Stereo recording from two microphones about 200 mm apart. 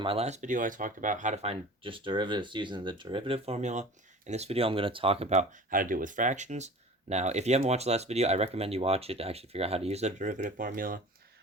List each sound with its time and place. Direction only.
0.0 s speech: 30° right (ahead or behind); by 11.0 s 45° right (ahead or behind)